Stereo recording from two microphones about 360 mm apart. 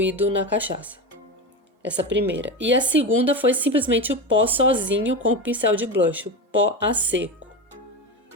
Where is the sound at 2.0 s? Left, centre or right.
Right.